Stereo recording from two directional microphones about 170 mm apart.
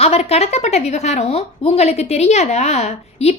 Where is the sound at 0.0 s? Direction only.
35° left (ahead or behind).